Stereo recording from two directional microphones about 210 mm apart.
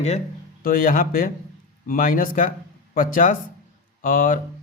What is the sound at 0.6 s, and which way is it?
Speech, 40° left (ahead or behind).